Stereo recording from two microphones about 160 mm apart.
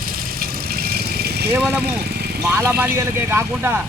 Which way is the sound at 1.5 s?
10° right (ahead or behind).